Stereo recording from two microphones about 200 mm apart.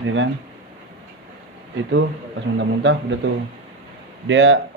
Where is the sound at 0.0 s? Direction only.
70° right (ahead or behind).